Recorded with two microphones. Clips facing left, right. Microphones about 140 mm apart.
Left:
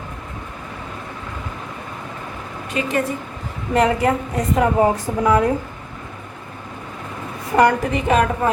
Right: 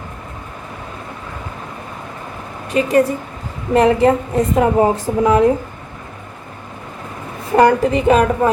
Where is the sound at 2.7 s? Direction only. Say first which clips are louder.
Right 7 dB; 35° right (ahead or behind).